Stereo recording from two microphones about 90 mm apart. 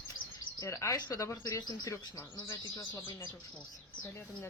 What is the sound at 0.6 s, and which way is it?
Speech, 35° left (ahead or behind).